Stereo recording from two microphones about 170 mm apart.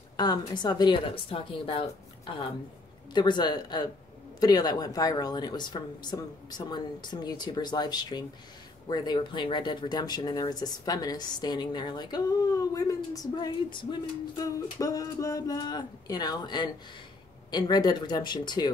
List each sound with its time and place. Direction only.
0.2 s speech: 25° left (ahead or behind)